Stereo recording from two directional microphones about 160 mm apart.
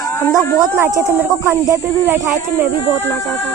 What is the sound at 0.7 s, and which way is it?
Speech, 15° right (ahead or behind).